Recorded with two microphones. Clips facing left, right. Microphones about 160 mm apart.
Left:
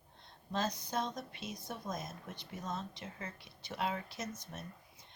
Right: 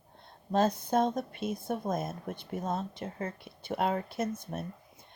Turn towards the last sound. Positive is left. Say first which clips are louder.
# right 10 dB
turn(degrees=-55)  # may be behind; listen again after turning